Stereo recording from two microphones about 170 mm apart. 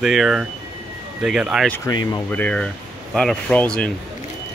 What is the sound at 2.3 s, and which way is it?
Speech, 10° left (ahead or behind).